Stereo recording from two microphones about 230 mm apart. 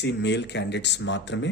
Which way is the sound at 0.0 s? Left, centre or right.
Left.